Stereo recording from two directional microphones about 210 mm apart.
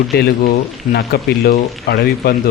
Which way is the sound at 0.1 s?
45° left (ahead or behind).